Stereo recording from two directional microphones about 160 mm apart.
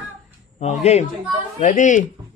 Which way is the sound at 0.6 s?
45° left (ahead or behind).